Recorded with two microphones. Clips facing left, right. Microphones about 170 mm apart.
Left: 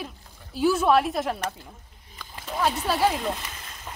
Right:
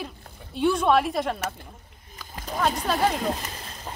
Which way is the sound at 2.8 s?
5° left (ahead or behind).